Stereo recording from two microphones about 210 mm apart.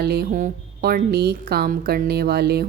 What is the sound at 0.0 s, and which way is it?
A woman's voice, 50° right (ahead or behind).